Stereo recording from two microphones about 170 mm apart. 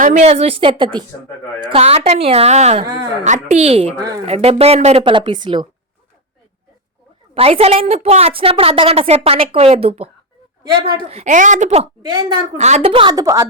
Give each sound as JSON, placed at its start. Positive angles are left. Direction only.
{"t": 0.0, "sound": "a woman's voice", "side_deg": -45}
{"t": 7.3, "sound": "a woman's voice", "side_deg": -35}
{"t": 11.1, "sound": "speech", "side_deg": -45}
{"t": 12.0, "sound": "a woman's voice", "side_deg": -25}
{"t": 12.5, "sound": "a woman's voice", "side_deg": -40}